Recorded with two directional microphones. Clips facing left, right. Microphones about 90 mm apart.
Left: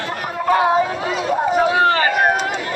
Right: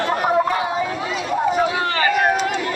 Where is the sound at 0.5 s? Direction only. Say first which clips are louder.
Left 7 dB; 50° left (ahead or behind).